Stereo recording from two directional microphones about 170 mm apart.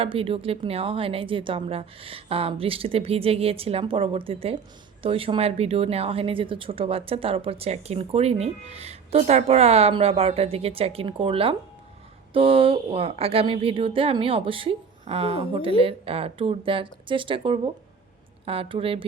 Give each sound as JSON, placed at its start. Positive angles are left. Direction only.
{"t": 0.0, "sound": "a woman's voice", "side_deg": -35}